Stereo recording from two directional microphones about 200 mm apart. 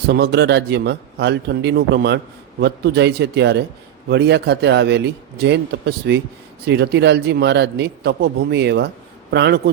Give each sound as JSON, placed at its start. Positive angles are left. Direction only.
{"t": 0.1, "sound": "a man's voice", "side_deg": -55}